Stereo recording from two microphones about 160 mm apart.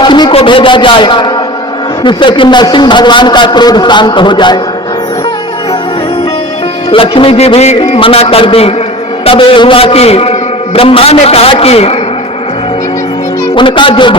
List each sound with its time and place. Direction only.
0.0 s a sound: 30° left (ahead or behind)
2.0 s a man's voice: 30° left (ahead or behind)
6.9 s a man's voice: 35° left (ahead or behind)
13.6 s a man's voice: 30° left (ahead or behind)